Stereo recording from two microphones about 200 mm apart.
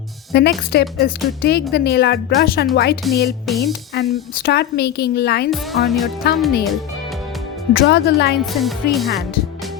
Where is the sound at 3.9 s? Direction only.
55° left (ahead or behind).